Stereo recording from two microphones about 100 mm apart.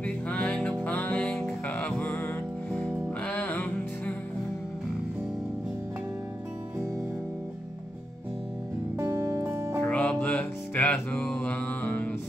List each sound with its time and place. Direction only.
0.0 s music: 10° left (ahead or behind)
8.9 s music: 30° right (ahead or behind)
9.8 s music: 10° left (ahead or behind)